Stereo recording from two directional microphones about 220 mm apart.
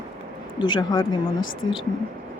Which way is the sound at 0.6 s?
20° left (ahead or behind).